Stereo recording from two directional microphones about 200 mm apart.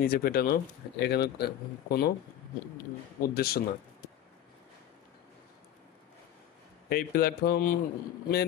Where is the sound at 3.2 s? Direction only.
50° left (ahead or behind).